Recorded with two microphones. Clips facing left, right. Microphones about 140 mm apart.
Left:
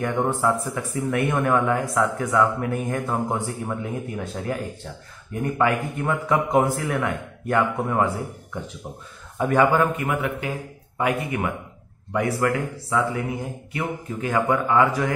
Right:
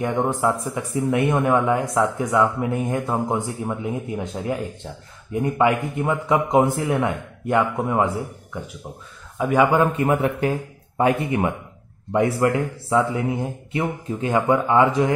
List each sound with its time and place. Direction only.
0.0 s speech: 20° right (ahead or behind)
9.4 s a man's voice: 10° right (ahead or behind)
9.9 s speech: 35° right (ahead or behind)